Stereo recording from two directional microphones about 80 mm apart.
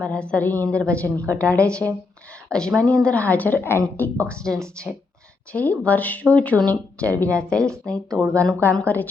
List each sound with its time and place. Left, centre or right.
0.0 s a woman's voice: centre
5.5 s a woman's voice: centre